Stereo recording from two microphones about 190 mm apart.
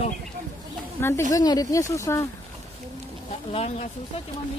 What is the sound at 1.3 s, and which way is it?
Speech, 20° left (ahead or behind).